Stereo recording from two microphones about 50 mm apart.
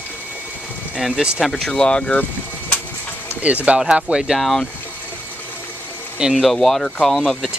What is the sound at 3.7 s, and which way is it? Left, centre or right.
Speech, centre.